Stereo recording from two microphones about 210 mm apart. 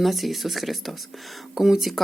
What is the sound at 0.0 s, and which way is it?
Speech, centre (ahead or behind).